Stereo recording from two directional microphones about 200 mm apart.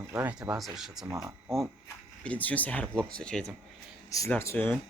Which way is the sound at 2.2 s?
5° left (ahead or behind).